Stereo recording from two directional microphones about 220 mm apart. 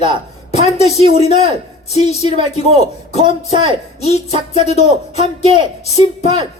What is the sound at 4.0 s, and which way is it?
Speech, 30° left (ahead or behind).